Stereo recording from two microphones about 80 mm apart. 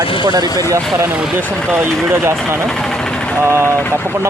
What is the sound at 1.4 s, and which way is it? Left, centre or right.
Speech, right.